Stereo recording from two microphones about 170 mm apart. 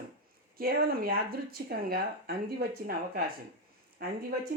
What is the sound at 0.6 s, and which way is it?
Speech, 60° right (ahead or behind).